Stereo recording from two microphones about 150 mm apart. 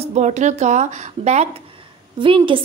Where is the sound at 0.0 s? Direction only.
50° right (ahead or behind).